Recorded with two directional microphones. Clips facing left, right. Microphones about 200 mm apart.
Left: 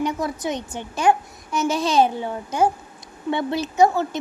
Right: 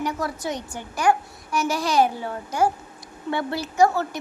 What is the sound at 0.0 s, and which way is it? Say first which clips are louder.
A woman's voice: left 3 dB; 20° left (ahead or behind).